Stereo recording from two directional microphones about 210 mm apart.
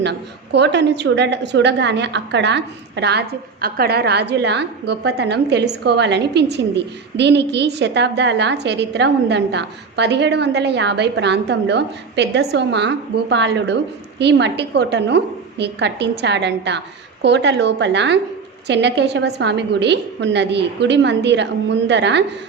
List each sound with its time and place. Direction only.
0.0 s a woman's voice: 55° right (ahead or behind)